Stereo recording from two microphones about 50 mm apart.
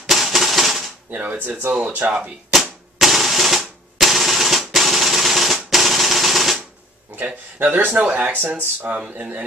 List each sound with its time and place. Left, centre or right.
0.1 s music: centre
1.1 s speech: right
3.0 s drum: centre
7.1 s a sound: right
7.5 s speech: right